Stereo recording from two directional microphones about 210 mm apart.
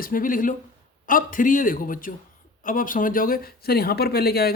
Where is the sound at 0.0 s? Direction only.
40° left (ahead or behind).